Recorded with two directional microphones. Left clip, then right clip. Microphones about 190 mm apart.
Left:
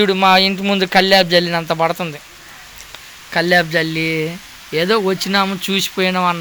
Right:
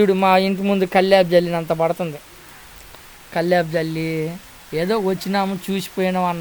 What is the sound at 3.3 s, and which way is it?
Speech, 5° right (ahead or behind).